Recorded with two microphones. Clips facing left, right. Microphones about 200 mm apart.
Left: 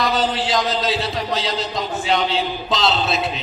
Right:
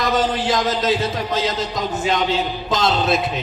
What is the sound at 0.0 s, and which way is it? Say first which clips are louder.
Speech: right 1 dB; 50° right (ahead or behind).